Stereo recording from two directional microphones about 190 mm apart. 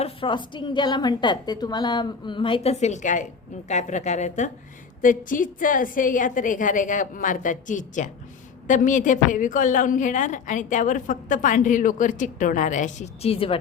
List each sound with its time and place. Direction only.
0.0 s a woman's voice: 25° left (ahead or behind)